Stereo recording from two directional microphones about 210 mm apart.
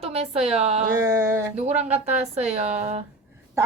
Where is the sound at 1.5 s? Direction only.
30° right (ahead or behind).